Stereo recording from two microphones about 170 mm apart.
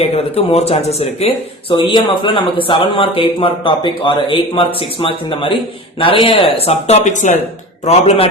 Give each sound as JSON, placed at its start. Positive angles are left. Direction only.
{"t": 0.0, "sound": "a man's voice", "side_deg": 35}
{"t": 1.7, "sound": "a man's voice", "side_deg": 30}